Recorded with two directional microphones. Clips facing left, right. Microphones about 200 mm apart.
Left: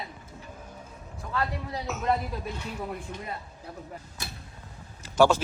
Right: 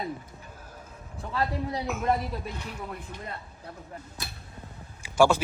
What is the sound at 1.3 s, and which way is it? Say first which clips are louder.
Speech: right 2 dB; 25° right (ahead or behind).